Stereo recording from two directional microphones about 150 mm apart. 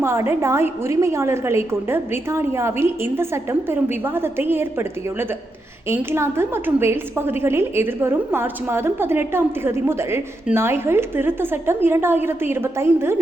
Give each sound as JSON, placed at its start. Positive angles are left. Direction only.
{"t": 0.0, "sound": "a woman's voice", "side_deg": -15}
{"t": 5.9, "sound": "a woman's voice", "side_deg": -15}